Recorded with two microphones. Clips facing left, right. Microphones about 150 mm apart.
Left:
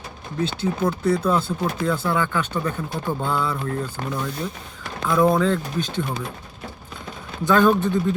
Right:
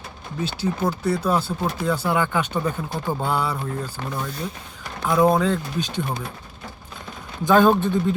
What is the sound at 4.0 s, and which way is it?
Speech, 50° left (ahead or behind).